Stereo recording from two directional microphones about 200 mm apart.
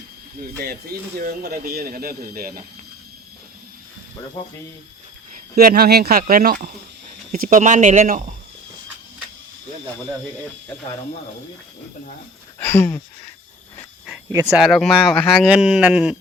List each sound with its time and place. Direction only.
0.6 s speech: 50° right (ahead or behind)
5.3 s speech: 50° right (ahead or behind)
12.5 s speech: 10° left (ahead or behind)
14.3 s speech: 15° right (ahead or behind)
14.5 s speech: centre (ahead or behind)